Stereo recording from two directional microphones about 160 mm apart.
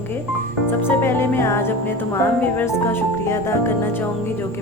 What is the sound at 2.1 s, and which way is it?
Speech, 10° left (ahead or behind).